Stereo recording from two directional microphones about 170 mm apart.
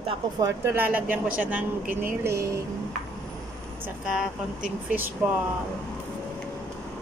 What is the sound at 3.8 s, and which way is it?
A woman's voice, 5° right (ahead or behind).